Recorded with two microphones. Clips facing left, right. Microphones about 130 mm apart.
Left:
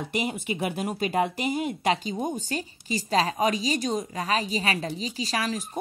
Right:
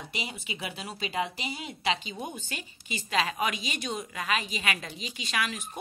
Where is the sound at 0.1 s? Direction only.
50° left (ahead or behind).